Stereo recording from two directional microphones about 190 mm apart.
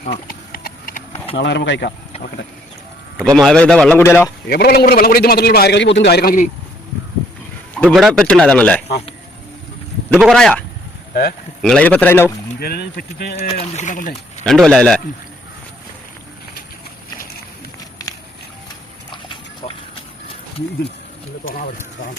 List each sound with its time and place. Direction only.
0.0 s horse: 50° left (ahead or behind)
1.5 s speech: 65° left (ahead or behind)
3.3 s speech: 5° left (ahead or behind)
4.4 s a man's voice: 55° left (ahead or behind)
7.8 s speech: 5° left (ahead or behind)
10.2 s speech: centre (ahead or behind)
11.1 s speech: 50° left (ahead or behind)
11.6 s a man's voice: 5° left (ahead or behind)
12.5 s a man's voice: 55° left (ahead or behind)
13.5 s speech: 35° left (ahead or behind)
14.4 s speech: 5° left (ahead or behind)
19.1 s horse: 25° left (ahead or behind)